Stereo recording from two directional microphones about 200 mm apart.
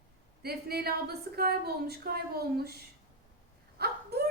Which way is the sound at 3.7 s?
50° right (ahead or behind).